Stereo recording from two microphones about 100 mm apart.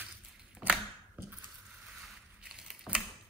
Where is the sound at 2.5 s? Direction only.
5° right (ahead or behind).